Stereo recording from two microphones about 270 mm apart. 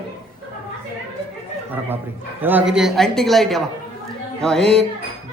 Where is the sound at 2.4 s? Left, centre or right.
Centre.